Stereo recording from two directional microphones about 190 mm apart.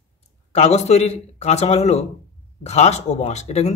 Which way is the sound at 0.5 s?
35° left (ahead or behind).